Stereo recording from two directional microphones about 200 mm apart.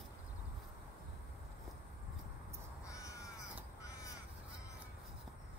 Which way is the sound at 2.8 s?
15° left (ahead or behind).